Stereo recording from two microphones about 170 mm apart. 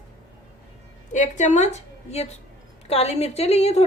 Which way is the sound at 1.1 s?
45° left (ahead or behind).